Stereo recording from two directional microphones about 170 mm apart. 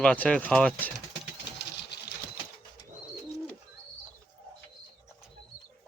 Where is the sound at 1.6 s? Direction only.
80° left.